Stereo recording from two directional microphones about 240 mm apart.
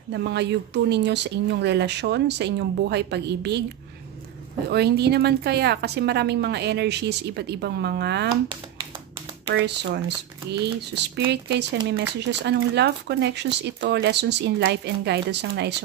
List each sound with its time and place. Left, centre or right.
0.1 s a woman's voice: right
4.6 s a woman's voice: right
9.5 s a woman's voice: right